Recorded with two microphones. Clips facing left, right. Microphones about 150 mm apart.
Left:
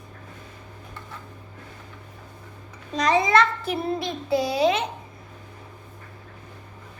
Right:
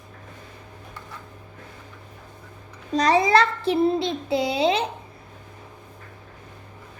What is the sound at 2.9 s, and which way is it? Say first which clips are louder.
A child's voice: right 2 dB; 35° right (ahead or behind).